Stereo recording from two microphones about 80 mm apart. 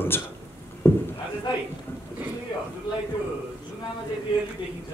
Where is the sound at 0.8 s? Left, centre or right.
Left.